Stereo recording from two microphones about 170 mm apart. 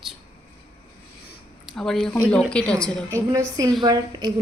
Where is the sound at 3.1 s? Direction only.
20° right (ahead or behind).